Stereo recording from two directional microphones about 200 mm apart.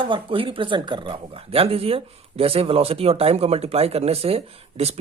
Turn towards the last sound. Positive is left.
turn(degrees=-30)  # may be behind; listen again after turning